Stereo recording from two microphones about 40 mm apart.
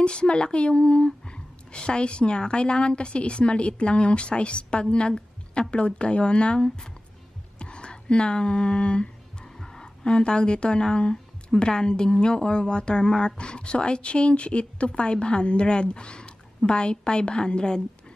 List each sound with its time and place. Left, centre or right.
0.0 s a woman's voice: left
7.5 s a sound: left
9.6 s a woman's voice: centre